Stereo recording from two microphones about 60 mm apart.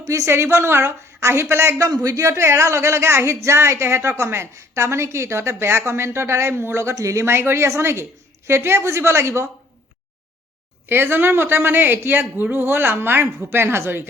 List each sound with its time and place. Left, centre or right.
0.0 s a woman's voice: right
0.3 s a woman's voice: right
1.8 s speech: right
2.3 s a woman's voice: right
6.9 s a woman's voice: right
10.8 s a woman's voice: right